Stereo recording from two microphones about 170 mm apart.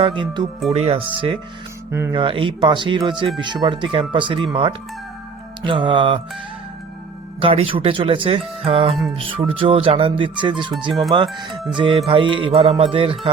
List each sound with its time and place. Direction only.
0.0 s speech: 30° right (ahead or behind)
1.9 s speech: 15° right (ahead or behind)
2.1 s speech: 30° right (ahead or behind)
7.3 s speech: 35° right (ahead or behind)